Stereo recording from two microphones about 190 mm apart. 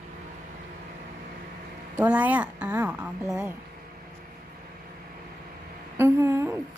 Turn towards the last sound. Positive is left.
turn(degrees=-10)  # may be behind; listen again after turning